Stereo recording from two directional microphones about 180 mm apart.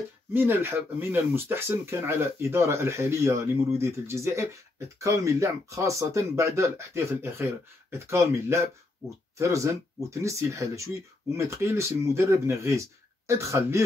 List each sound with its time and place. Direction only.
0.3 s speech: 10° right (ahead or behind)